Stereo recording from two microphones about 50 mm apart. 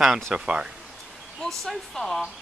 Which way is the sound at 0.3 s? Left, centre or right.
Right.